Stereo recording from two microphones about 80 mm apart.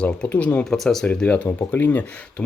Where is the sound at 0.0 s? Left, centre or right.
Centre.